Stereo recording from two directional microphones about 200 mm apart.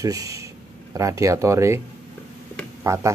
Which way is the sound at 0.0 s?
15° right (ahead or behind).